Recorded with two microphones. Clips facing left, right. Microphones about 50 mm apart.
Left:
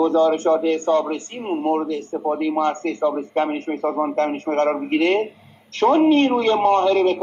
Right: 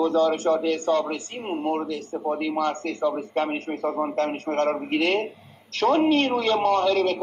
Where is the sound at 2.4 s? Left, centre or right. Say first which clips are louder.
Left 5 dB; left.